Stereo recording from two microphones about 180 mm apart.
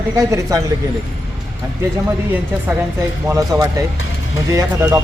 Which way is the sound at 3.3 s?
20° right (ahead or behind).